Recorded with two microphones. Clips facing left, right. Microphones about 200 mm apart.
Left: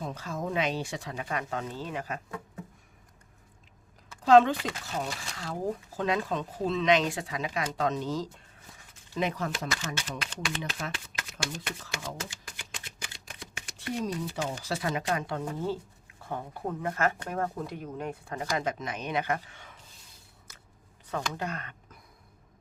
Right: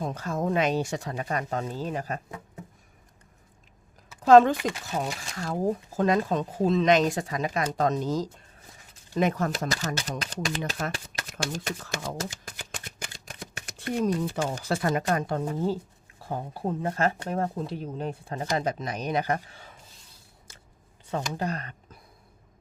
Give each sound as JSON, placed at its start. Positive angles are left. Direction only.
{"t": 0.0, "sound": "speech", "side_deg": -45}
{"t": 4.2, "sound": "speech", "side_deg": -45}
{"t": 6.0, "sound": "speech", "side_deg": -45}
{"t": 20.5, "sound": "a sound", "side_deg": -30}
{"t": 21.1, "sound": "speech", "side_deg": -30}